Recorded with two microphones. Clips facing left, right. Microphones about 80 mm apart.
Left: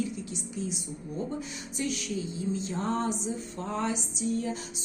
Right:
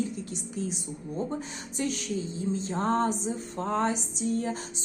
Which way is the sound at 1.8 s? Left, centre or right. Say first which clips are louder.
Right 2 dB; right.